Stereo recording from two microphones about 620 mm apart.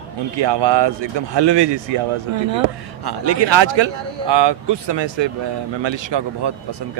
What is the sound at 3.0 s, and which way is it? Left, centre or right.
Speech, right.